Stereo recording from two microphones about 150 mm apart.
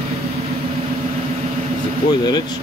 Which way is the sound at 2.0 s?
30° left (ahead or behind).